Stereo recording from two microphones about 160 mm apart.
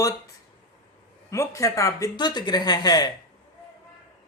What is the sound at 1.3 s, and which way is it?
Speech, 20° left (ahead or behind).